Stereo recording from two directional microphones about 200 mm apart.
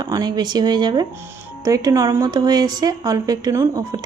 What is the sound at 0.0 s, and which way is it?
Speech, 20° right (ahead or behind).